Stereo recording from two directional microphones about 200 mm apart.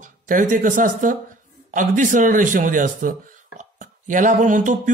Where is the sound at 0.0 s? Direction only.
40° right (ahead or behind).